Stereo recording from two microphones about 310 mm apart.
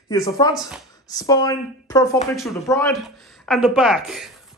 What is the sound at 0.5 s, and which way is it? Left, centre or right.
Speech, centre.